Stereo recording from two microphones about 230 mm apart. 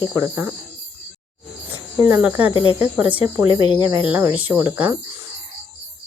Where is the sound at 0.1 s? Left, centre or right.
Centre.